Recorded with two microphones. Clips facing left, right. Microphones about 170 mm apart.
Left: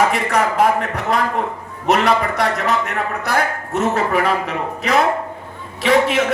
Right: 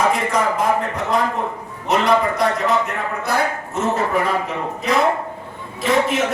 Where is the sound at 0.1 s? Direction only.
70° left (ahead or behind).